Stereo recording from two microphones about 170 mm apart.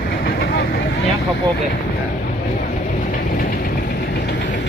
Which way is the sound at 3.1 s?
60° left (ahead or behind).